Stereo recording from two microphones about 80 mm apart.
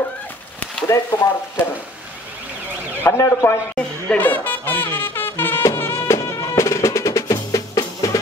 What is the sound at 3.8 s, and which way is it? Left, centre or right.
Brass instrument, centre.